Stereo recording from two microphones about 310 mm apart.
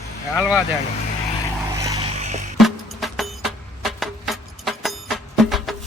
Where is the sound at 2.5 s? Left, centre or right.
Centre.